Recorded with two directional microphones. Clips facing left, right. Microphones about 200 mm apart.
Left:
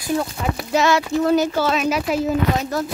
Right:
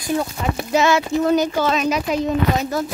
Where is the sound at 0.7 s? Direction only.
Centre (ahead or behind).